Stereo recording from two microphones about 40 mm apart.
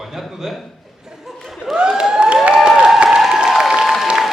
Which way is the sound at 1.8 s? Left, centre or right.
Right.